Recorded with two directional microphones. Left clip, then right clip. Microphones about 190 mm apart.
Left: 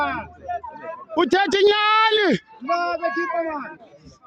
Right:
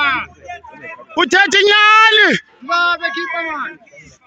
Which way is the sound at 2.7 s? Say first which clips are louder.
Right 7 dB; 50° left (ahead or behind).